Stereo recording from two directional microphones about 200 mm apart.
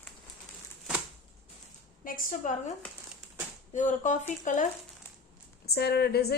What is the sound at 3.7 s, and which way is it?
Speech, 40° left (ahead or behind).